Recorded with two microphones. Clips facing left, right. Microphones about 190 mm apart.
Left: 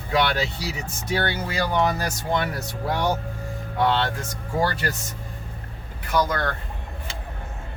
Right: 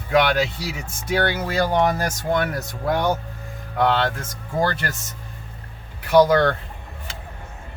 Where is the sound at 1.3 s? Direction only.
50° right (ahead or behind).